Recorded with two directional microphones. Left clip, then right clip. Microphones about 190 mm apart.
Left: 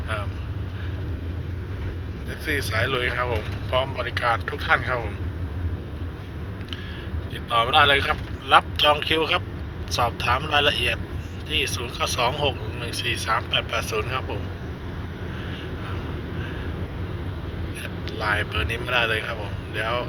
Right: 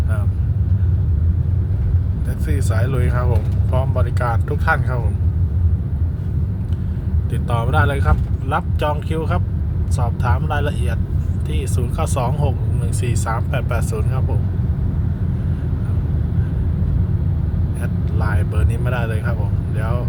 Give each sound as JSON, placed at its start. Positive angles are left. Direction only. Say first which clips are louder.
{"t": 2.5, "sound": "speech", "louder": "left 3 dB", "side_deg": -15}
{"t": 7.5, "sound": "speech", "louder": "left 4 dB", "side_deg": -15}
{"t": 18.2, "sound": "speech", "louder": "left 4 dB", "side_deg": -15}